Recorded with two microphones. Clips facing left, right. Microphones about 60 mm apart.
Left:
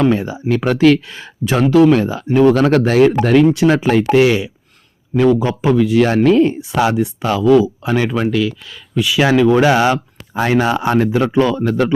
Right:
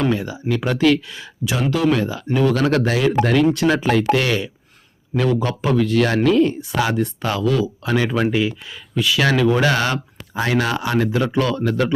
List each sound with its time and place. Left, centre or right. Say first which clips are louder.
0.1 s speech: left 5 dB; left
3.3 s speech: left 5 dB; centre
6.2 s speech: left 4 dB; left
6.9 s speech: left 4 dB; centre
8.3 s speech: left 3 dB; right
9.0 s speech: left 4 dB; centre
9.2 s speech: left 6 dB; centre
11.6 s speech: left 4 dB; left